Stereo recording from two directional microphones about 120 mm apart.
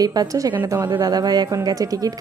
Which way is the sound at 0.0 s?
30° right (ahead or behind).